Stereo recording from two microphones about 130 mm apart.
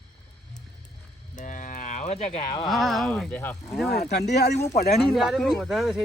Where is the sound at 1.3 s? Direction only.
75° left (ahead or behind); by 2.5 s 55° left (ahead or behind).